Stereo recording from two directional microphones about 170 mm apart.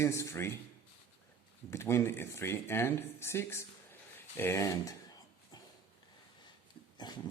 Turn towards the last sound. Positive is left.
turn(degrees=25)  # may be behind; listen again after turning